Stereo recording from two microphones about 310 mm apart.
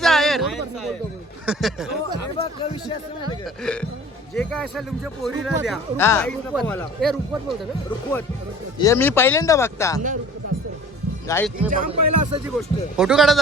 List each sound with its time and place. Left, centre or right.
0.0 s a sound: centre
1.5 s speech: centre
3.4 s speech: centre
8.8 s speech: centre
11.3 s speech: centre
11.7 s speech: right
11.9 s speech: right
12.5 s speech: centre